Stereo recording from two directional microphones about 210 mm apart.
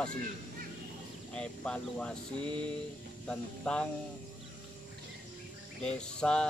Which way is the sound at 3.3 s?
5° left (ahead or behind).